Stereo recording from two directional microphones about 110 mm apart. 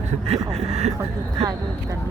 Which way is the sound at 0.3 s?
70° right (ahead or behind).